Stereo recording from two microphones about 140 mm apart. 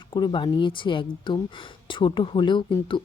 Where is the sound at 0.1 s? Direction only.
35° left (ahead or behind).